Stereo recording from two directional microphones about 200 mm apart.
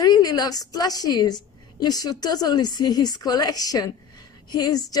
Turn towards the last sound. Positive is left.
turn(degrees=20)  # may be behind; listen again after turning